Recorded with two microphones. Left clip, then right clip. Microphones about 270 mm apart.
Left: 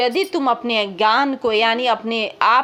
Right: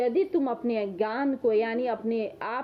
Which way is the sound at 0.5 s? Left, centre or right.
Left.